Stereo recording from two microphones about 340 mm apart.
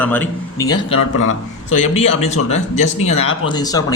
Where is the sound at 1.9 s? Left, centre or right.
Centre.